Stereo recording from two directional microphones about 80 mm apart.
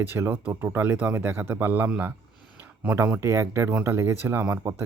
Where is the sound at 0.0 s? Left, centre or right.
Right.